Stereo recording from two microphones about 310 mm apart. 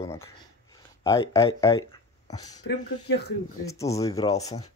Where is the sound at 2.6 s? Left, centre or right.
Left.